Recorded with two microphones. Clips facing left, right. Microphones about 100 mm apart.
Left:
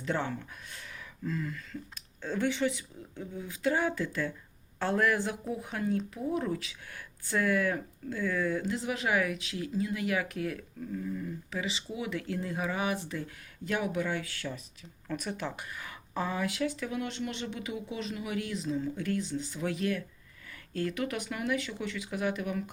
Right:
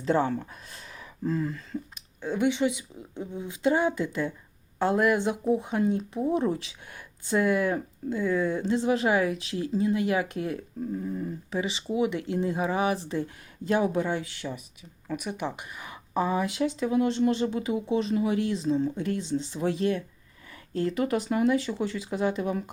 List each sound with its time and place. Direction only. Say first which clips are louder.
0.0 s speech: right 8 dB; 30° right (ahead or behind)
0.8 s a sound: right 7 dB; 30° right (ahead or behind)
2.0 s speech: right 4 dB; 15° right (ahead or behind)